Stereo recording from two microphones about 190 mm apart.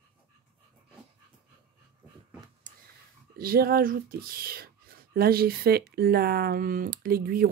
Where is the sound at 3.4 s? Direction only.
50° right (ahead or behind).